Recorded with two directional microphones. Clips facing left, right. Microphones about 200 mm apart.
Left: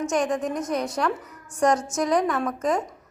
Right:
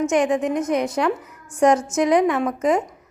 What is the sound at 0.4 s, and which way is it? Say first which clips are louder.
Speech: right 5 dB; 20° right (ahead or behind).